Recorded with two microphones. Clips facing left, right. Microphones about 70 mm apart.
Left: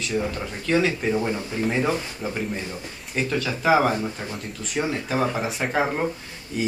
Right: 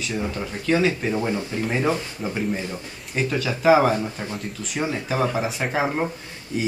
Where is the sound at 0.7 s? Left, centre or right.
Centre.